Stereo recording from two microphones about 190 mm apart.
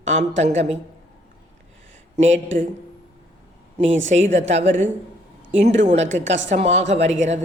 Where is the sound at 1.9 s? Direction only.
40° right (ahead or behind).